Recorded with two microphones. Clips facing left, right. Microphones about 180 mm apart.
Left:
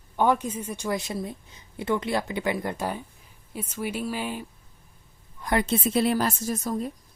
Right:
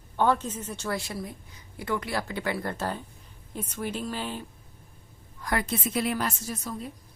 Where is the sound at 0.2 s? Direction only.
15° left (ahead or behind).